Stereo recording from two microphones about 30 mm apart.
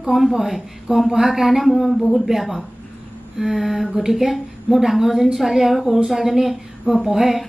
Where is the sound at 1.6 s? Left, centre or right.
Centre.